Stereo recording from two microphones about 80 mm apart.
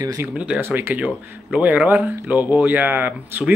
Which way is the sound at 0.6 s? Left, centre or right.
Right.